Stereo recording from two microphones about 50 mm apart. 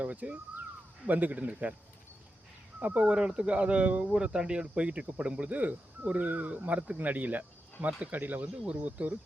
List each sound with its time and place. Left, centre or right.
0.0 s speech: right
2.8 s speech: right